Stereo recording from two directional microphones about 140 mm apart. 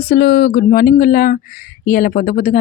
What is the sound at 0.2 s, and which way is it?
Speech, 90° left.